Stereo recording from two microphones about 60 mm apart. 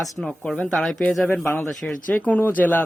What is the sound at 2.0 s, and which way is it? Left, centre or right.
Speech, left.